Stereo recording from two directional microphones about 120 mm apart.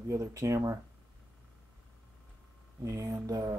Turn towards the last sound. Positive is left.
turn(degrees=-30)  # may be behind; listen again after turning